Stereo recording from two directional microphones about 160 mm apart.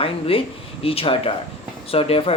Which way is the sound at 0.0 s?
35° left (ahead or behind).